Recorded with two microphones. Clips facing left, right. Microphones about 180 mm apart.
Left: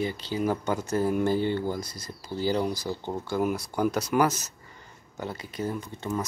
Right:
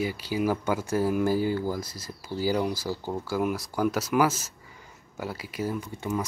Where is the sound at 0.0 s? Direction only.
10° right (ahead or behind).